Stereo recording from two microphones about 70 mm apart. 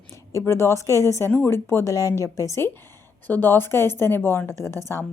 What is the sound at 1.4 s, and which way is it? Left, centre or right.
A woman's voice, left.